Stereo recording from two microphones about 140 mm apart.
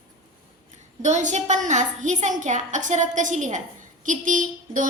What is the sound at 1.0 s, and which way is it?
A woman's voice, 60° right (ahead or behind).